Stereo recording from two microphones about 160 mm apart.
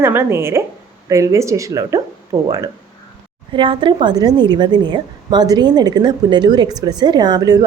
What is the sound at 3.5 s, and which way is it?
A woman's voice, 30° right (ahead or behind).